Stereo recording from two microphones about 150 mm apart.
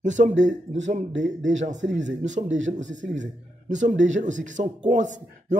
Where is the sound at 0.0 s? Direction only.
55° right (ahead or behind).